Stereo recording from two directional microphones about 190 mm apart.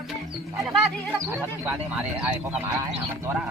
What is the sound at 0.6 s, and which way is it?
Speech, centre (ahead or behind).